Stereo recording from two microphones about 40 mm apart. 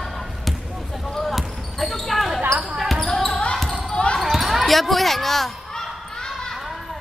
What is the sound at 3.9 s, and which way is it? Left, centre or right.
Basketball bounce, left.